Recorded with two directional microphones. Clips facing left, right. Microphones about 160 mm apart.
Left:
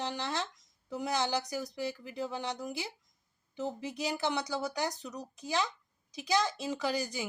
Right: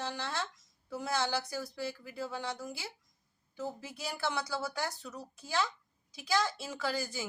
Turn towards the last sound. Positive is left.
turn(degrees=20)  # may be behind; listen again after turning